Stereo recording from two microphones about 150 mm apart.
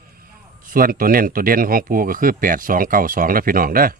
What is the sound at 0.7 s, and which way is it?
Speech, 70° right (ahead or behind).